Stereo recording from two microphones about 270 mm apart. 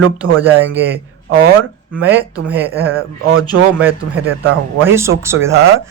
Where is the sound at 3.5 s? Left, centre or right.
Right.